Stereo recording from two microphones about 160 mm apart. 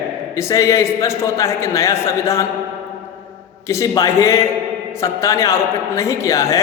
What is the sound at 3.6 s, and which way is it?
A man's voice, 20° left (ahead or behind).